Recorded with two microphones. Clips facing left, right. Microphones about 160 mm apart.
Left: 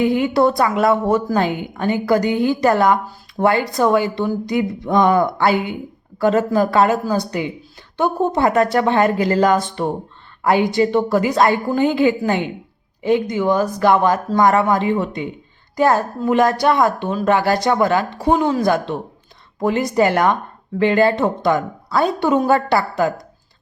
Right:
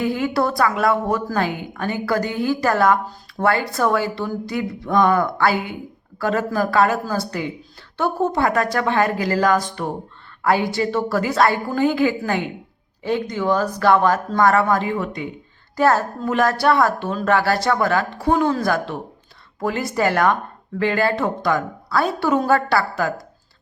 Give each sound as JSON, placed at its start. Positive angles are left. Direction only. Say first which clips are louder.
{"t": 0.0, "sound": "a woman's voice", "louder": "left 5 dB", "side_deg": 20}